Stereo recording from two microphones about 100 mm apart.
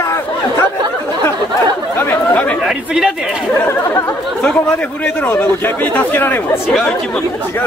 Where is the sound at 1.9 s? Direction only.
20° left (ahead or behind).